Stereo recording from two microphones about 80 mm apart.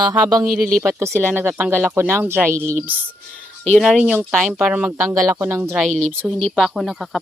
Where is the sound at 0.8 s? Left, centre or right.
Right.